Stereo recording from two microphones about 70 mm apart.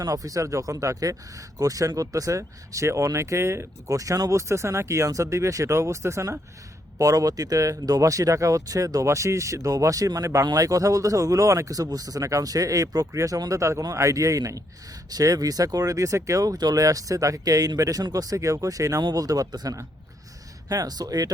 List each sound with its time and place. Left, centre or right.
0.0 s speech: right
7.0 s speech: right